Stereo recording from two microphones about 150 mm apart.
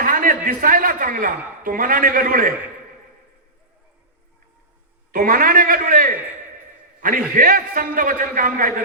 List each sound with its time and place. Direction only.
0.0 s a man's voice: 65° right (ahead or behind)
5.1 s a man's voice: 70° right (ahead or behind)